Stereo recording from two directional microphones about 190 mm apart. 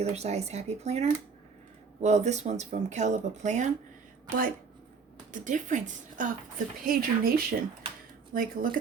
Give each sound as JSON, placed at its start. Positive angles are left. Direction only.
{"t": 0.0, "sound": "speech", "side_deg": -35}